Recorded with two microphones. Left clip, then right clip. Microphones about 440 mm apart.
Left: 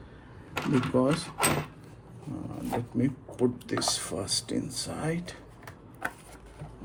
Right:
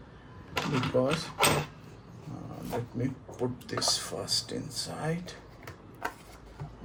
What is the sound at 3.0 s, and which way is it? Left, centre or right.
Speech, centre.